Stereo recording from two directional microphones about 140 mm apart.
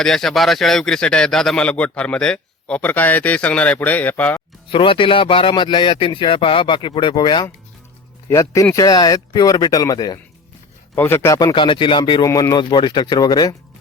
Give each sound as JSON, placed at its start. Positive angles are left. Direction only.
{"t": 0.0, "sound": "a man's voice", "side_deg": 5}
{"t": 4.7, "sound": "a man's voice", "side_deg": 40}
{"t": 8.3, "sound": "speech", "side_deg": 20}
{"t": 10.9, "sound": "a man's voice", "side_deg": 15}
{"t": 12.2, "sound": "speech", "side_deg": 25}